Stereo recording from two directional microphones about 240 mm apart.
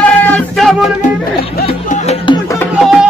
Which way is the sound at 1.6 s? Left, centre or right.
Left.